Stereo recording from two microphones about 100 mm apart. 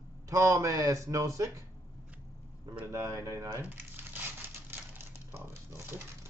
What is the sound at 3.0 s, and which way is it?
Speech, 30° right (ahead or behind).